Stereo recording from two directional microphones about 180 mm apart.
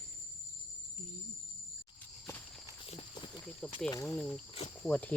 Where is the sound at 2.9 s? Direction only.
25° left (ahead or behind).